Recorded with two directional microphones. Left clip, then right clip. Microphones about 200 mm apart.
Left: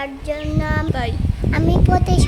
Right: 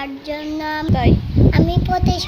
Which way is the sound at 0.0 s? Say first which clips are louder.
Left 1 dB; 15° left (ahead or behind).